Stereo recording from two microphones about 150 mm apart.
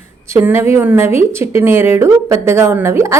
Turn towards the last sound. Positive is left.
turn(degrees=-15)  # may be behind; listen again after turning